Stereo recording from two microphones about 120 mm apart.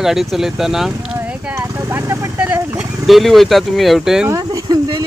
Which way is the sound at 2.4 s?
10° right (ahead or behind).